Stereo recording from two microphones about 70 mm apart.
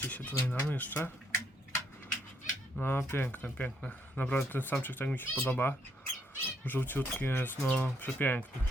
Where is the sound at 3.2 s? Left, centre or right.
Left.